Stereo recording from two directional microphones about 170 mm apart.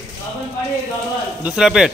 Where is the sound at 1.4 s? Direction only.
5° right (ahead or behind).